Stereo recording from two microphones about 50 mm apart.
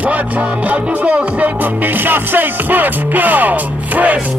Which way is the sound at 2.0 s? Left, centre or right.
Right.